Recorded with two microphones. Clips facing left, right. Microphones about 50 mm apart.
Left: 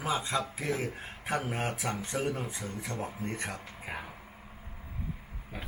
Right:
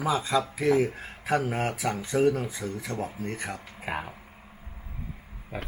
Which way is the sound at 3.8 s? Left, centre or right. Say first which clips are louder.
Right 9 dB; right.